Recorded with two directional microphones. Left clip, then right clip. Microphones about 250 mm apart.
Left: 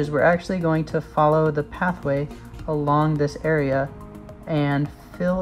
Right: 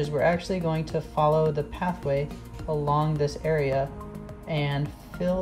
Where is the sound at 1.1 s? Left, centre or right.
Left.